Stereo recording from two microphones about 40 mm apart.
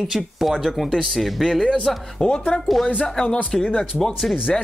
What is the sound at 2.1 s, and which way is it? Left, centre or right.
Speech, left.